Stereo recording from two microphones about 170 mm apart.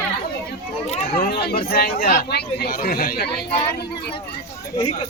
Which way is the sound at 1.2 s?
70° left (ahead or behind).